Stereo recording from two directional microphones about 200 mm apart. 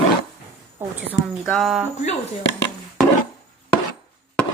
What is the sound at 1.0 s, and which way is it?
Speech, centre (ahead or behind).